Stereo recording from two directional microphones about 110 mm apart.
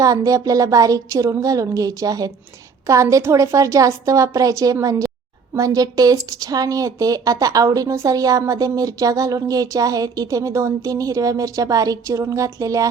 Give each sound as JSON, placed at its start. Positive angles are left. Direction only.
{"t": 0.0, "sound": "a woman's voice", "side_deg": -30}